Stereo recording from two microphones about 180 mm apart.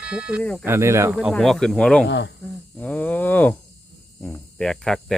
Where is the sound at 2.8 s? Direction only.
10° left (ahead or behind).